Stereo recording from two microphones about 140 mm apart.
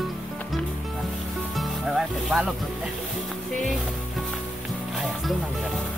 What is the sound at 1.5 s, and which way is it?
Music, centre (ahead or behind).